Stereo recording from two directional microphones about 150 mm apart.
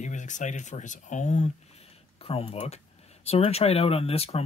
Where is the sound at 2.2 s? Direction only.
40° left (ahead or behind).